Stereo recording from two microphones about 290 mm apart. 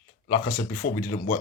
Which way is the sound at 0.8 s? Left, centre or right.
Left.